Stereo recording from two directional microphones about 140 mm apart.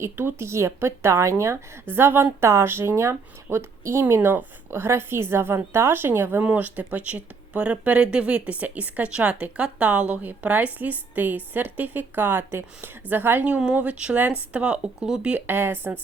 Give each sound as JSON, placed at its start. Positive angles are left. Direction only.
{"t": 0.0, "sound": "a woman's voice", "side_deg": -15}